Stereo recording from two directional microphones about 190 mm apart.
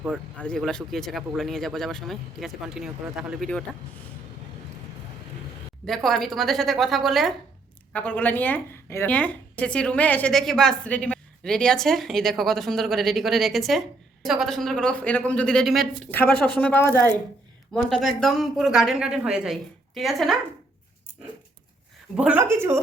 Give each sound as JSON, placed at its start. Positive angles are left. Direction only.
{"t": 0.3, "sound": "a woman's voice", "side_deg": 5}
{"t": 5.8, "sound": "a woman's voice", "side_deg": 0}
{"t": 17.8, "sound": "a woman's voice", "side_deg": 0}
{"t": 22.1, "sound": "speech", "side_deg": -5}